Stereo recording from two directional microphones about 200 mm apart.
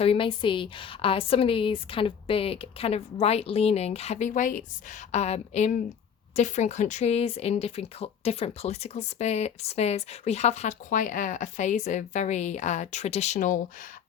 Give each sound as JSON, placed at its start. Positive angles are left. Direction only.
{"t": 0.0, "sound": "a woman's voice", "side_deg": 25}